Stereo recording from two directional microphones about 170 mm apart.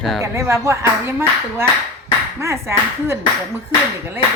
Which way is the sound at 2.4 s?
15° right (ahead or behind).